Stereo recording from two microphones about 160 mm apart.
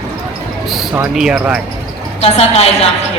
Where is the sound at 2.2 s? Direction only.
40° left (ahead or behind).